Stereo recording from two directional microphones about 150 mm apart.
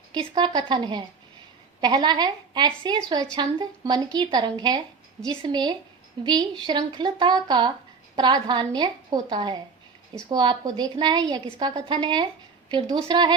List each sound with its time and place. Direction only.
0.1 s a woman's voice: 30° right (ahead or behind)